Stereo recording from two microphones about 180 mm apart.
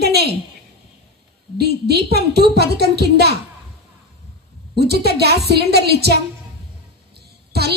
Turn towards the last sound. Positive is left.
turn(degrees=-65)  # may be behind; listen again after turning